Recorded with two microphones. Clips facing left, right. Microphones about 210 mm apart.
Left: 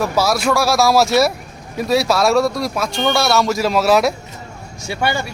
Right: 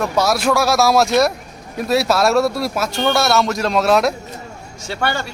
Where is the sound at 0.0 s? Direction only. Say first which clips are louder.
Even; centre (ahead or behind).